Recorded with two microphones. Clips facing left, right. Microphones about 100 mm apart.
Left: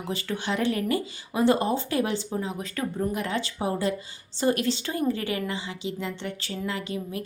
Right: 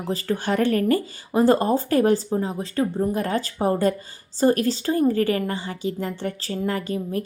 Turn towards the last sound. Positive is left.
turn(degrees=-40)  # may be behind; listen again after turning